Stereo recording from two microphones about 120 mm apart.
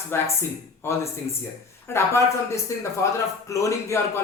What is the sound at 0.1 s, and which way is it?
A man's voice, 20° left (ahead or behind).